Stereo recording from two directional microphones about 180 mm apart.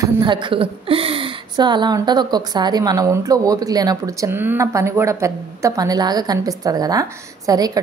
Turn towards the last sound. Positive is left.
turn(degrees=-20)  # may be behind; listen again after turning